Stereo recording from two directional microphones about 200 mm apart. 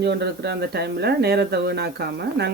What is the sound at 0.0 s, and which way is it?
Speech, 55° right (ahead or behind).